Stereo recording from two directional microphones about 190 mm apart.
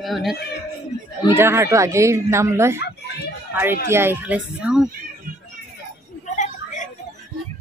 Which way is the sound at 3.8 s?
10° right (ahead or behind).